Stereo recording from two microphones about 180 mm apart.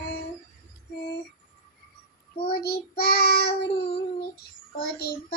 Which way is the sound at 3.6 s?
25° left (ahead or behind).